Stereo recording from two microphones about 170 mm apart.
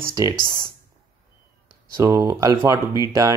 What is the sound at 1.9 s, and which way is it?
Speech, 15° right (ahead or behind).